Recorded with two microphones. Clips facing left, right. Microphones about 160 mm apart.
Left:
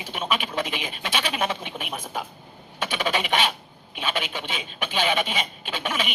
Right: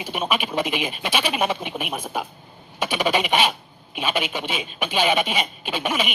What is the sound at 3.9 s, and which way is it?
Speech, 15° right (ahead or behind).